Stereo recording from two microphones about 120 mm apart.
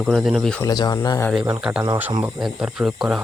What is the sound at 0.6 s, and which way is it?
Speech, 35° left (ahead or behind).